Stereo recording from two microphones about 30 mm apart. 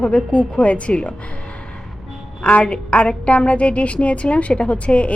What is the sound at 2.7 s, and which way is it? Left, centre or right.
A woman's voice, left.